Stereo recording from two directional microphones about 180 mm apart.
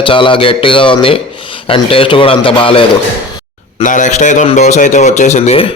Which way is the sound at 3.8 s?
45° left (ahead or behind).